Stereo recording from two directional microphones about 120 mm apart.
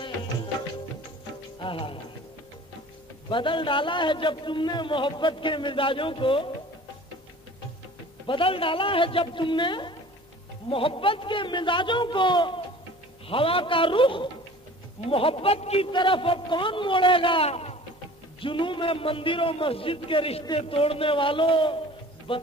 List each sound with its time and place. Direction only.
1.6 s music: 45° left (ahead or behind)
3.3 s a man's voice: 45° left (ahead or behind)
8.3 s a man's voice: 50° left (ahead or behind)
15.9 s a man's voice: 40° left (ahead or behind)
17.5 s a sound: 60° left (ahead or behind)
18.4 s a man's voice: 45° left (ahead or behind)